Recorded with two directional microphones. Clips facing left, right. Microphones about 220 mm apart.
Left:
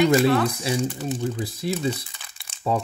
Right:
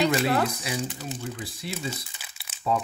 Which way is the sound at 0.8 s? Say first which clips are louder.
Left 7 dB; centre (ahead or behind).